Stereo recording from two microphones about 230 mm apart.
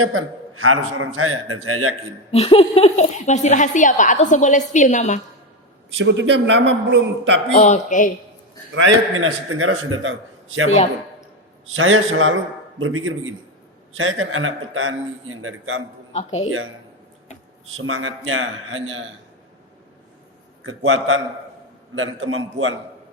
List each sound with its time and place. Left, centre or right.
0.0 s a man's voice: right
2.3 s speech: left
6.0 s a man's voice: right
7.5 s speech: left
8.7 s a man's voice: right
11.7 s a man's voice: right
16.1 s speech: left
17.7 s a man's voice: right
20.7 s a man's voice: right